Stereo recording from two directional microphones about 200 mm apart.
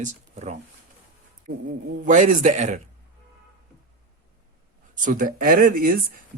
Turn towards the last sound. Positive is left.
turn(degrees=-45)  # may be behind; listen again after turning